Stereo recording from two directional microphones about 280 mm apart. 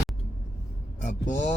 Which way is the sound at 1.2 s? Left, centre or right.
Left.